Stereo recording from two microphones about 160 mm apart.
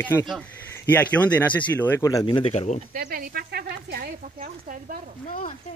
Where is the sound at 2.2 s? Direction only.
35° left (ahead or behind).